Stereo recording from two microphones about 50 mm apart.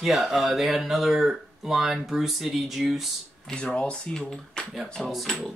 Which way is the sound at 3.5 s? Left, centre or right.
Centre.